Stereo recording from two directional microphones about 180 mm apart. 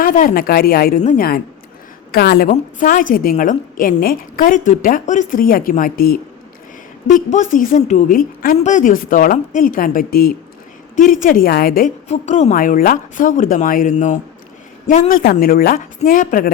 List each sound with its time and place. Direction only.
0.0 s a woman's voice: 50° left (ahead or behind)
2.1 s a woman's voice: 60° left (ahead or behind)
2.5 s a woman's voice: 45° left (ahead or behind)
12.0 s a woman's voice: 40° left (ahead or behind)